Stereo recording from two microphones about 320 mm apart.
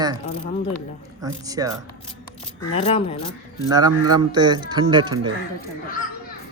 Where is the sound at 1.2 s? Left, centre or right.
Centre.